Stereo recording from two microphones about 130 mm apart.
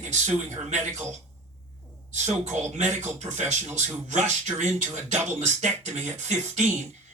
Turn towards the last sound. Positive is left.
turn(degrees=-65)  # may be behind; listen again after turning